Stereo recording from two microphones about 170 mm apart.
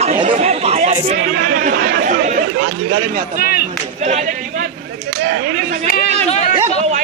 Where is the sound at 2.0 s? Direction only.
45° right (ahead or behind).